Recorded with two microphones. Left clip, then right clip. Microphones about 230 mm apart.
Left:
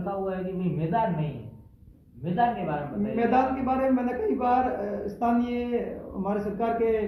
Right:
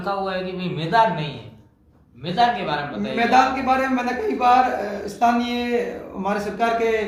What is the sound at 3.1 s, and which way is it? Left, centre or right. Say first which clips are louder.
A man's voice: right 7 dB; centre.